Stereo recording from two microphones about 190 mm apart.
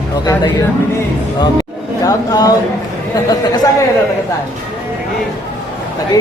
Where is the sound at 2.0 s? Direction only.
20° left (ahead or behind).